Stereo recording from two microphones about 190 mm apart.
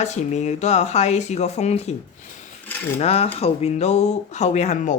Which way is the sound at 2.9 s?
30° left (ahead or behind).